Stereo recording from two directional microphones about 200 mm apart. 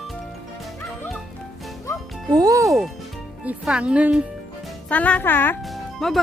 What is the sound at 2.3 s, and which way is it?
Speech, 20° right (ahead or behind).